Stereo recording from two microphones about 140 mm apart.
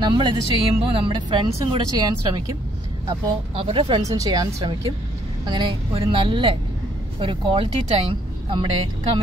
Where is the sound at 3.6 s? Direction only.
40° right (ahead or behind).